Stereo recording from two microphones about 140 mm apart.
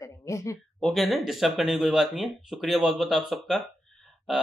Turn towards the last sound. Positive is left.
turn(degrees=0)  # may be behind; listen again after turning